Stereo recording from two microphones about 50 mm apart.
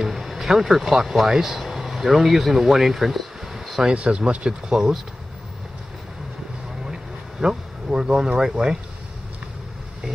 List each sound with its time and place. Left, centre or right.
0.0 s speech: centre
3.9 s speech: right
6.8 s vehicle: centre